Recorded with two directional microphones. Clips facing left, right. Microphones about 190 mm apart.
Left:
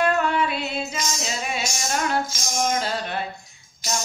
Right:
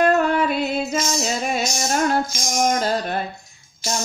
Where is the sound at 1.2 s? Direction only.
45° right (ahead or behind).